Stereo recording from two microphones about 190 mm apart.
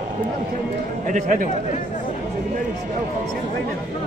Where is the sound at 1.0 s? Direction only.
45° right (ahead or behind).